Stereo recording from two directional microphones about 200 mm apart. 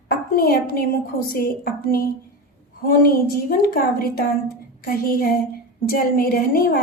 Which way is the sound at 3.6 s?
50° left (ahead or behind).